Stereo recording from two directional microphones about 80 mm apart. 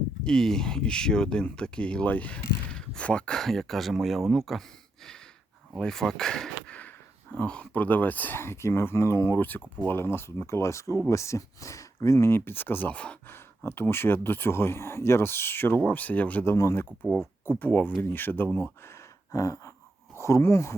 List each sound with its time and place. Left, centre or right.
0.3 s speech: centre
5.7 s a sound: centre
7.7 s speech: left
9.4 s speech: left
12.9 s speech: centre
13.7 s speech: left
16.5 s speech: left
17.6 s speech: left
19.3 s a sound: left
20.1 s speech: left